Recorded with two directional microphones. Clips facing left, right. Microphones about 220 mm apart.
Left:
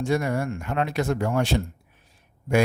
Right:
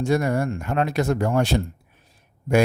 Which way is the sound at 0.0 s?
40° right (ahead or behind).